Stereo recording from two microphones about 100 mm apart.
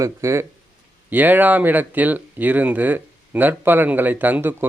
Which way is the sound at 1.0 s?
20° right (ahead or behind).